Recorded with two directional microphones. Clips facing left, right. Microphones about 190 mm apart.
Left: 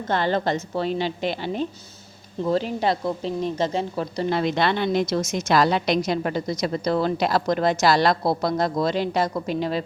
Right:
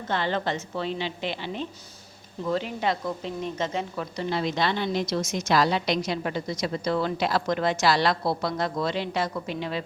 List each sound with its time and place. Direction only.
0.1 s a woman's voice: 40° left (ahead or behind)
4.3 s a woman's voice: 60° left (ahead or behind); by 9.8 s 40° left (ahead or behind)